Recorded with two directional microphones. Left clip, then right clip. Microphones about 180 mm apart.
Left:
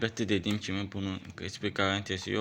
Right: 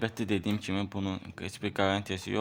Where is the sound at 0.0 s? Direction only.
25° right (ahead or behind).